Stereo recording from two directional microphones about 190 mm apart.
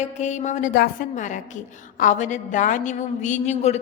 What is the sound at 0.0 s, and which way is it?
A woman's voice, 40° left (ahead or behind).